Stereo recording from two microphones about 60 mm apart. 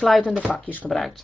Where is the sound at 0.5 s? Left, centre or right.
Left.